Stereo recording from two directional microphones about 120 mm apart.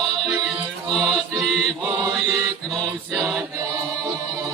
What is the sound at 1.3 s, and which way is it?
Mantra, 30° right (ahead or behind).